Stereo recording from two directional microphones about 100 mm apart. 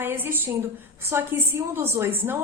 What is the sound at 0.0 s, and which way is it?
A woman's voice, 20° right (ahead or behind).